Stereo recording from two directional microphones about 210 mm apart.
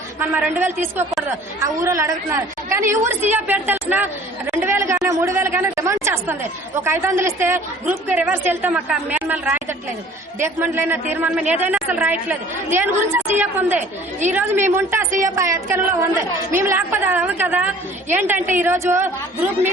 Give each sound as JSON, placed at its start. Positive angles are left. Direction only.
{"t": 0.2, "sound": "a woman's voice", "side_deg": -10}
{"t": 3.0, "sound": "a woman's voice", "side_deg": -35}
{"t": 3.3, "sound": "a woman's voice", "side_deg": -10}